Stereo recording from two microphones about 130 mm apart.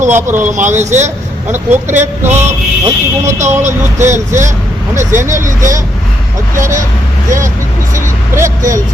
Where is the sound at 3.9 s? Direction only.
65° right (ahead or behind).